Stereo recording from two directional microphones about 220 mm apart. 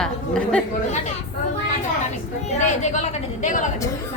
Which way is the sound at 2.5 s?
30° left (ahead or behind).